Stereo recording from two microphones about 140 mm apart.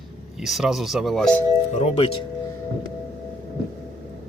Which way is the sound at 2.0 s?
40° left (ahead or behind).